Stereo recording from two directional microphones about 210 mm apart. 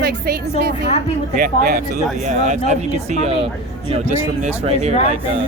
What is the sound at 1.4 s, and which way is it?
Speech, 45° right (ahead or behind).